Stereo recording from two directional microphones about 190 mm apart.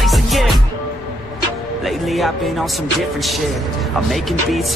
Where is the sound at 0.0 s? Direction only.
Centre (ahead or behind).